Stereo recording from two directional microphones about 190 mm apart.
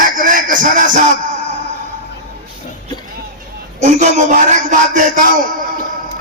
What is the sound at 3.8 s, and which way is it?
A man's voice, 40° right (ahead or behind).